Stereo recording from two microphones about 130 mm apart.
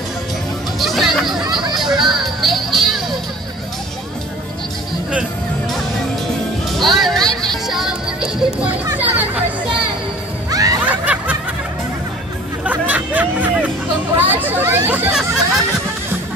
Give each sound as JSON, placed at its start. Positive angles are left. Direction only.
{"t": 0.7, "sound": "music", "side_deg": 0}
{"t": 1.4, "sound": "a sound", "side_deg": -35}
{"t": 1.8, "sound": "music", "side_deg": 0}
{"t": 6.8, "sound": "music", "side_deg": 0}
{"t": 10.5, "sound": "music", "side_deg": -30}
{"t": 10.9, "sound": "snicker", "side_deg": -10}
{"t": 12.6, "sound": "music", "side_deg": -10}
{"t": 14.1, "sound": "chatter", "side_deg": -15}